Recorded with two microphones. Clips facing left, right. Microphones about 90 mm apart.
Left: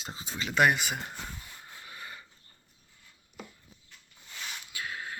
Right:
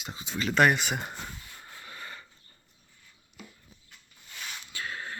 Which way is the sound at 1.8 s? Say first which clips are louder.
Right 2 dB; 15° left (ahead or behind).